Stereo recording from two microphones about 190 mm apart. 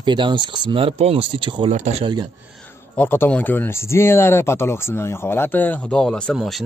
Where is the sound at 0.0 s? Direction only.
25° right (ahead or behind).